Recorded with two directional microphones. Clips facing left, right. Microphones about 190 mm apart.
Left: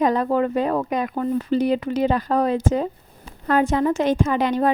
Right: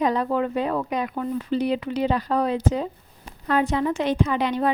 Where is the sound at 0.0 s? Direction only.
45° left (ahead or behind).